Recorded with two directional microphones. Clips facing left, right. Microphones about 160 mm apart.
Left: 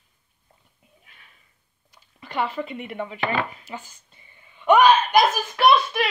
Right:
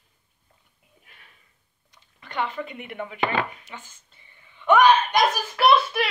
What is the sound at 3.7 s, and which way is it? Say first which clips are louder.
Speech: left 6 dB; 10° left (ahead or behind).